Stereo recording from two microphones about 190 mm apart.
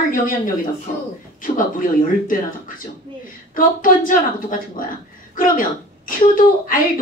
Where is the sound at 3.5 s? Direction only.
45° left (ahead or behind).